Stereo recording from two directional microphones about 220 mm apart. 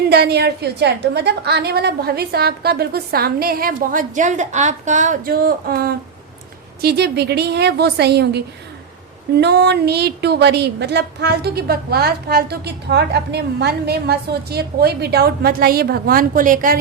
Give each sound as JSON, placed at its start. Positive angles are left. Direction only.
{"t": 0.1, "sound": "a woman's voice", "side_deg": -45}
{"t": 9.4, "sound": "a woman's voice", "side_deg": -50}